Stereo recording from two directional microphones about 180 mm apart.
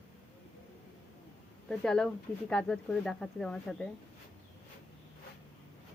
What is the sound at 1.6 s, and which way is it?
Speech, 5° left (ahead or behind).